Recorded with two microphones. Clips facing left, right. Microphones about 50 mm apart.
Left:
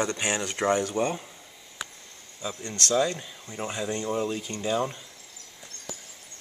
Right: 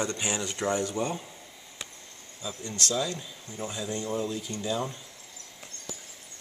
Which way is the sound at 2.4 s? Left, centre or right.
Left.